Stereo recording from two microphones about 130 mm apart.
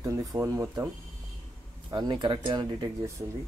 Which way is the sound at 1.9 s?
35° right (ahead or behind).